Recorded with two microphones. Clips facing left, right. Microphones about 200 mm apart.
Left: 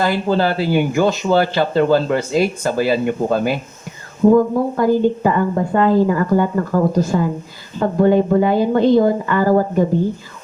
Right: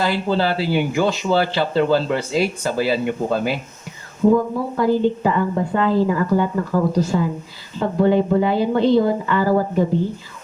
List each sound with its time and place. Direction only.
0.0 s speech: 50° left (ahead or behind)